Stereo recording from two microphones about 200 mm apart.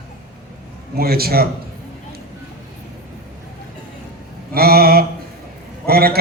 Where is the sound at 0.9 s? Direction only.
50° right (ahead or behind).